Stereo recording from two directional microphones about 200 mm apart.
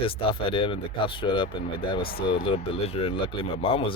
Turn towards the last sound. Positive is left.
turn(degrees=30)  # may be behind; listen again after turning